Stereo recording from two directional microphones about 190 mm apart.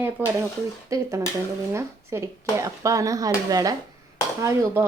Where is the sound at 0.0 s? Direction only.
10° right (ahead or behind).